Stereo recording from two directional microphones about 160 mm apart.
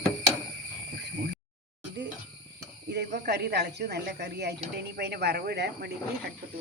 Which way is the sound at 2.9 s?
90° right.